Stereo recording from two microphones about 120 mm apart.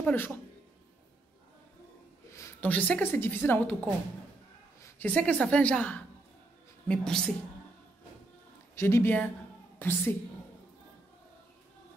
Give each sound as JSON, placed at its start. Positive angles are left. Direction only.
{"t": 0.0, "sound": "a woman's voice", "side_deg": 20}
{"t": 2.6, "sound": "a woman's voice", "side_deg": 15}
{"t": 8.7, "sound": "a woman's voice", "side_deg": 20}